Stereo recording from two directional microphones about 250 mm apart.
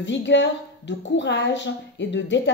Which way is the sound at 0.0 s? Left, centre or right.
Left.